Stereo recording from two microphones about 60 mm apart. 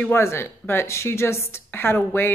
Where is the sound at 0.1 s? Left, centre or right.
Left.